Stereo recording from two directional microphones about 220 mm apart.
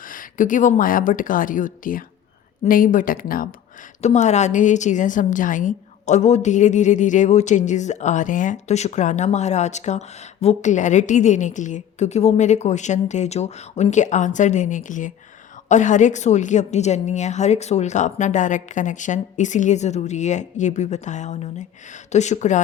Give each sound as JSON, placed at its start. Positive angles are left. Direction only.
{"t": 0.0, "sound": "a woman's voice", "side_deg": 40}